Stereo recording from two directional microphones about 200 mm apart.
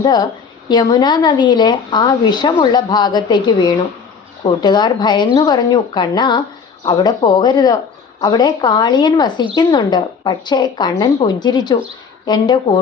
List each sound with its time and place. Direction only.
0.0 s a woman's voice: 20° left (ahead or behind)